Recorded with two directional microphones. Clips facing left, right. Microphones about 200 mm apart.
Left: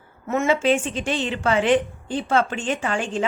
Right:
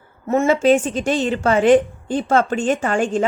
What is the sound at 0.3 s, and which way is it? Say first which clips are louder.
A woman's voice: right 5 dB; 40° right (ahead or behind).